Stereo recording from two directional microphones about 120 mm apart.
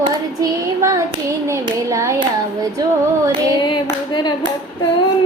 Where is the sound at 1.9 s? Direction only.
25° right (ahead or behind).